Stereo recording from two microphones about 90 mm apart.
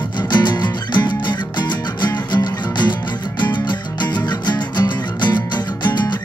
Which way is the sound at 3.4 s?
55° left (ahead or behind).